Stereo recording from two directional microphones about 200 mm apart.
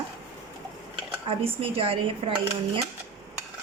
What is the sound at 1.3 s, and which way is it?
Speech, 25° right (ahead or behind).